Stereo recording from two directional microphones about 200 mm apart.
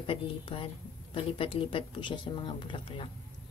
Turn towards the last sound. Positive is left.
turn(degrees=25)  # may be behind; listen again after turning